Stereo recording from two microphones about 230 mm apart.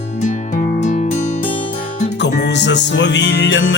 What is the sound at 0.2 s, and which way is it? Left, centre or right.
Music, left.